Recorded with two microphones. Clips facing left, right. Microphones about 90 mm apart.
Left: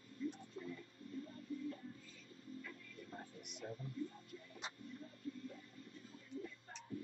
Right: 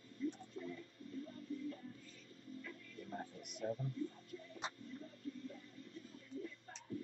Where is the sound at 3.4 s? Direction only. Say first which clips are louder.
Right 3 dB; 40° right (ahead or behind).